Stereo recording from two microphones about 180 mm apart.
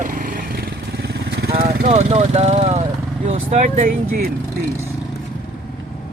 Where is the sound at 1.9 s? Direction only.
35° right (ahead or behind).